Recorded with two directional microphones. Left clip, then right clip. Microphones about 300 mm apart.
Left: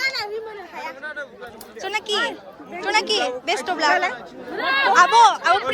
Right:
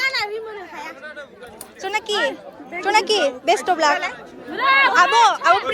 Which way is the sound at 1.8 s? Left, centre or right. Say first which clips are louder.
Right 2 dB; centre.